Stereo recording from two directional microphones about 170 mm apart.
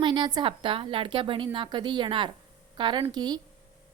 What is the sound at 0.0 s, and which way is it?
A woman's voice, 30° right (ahead or behind).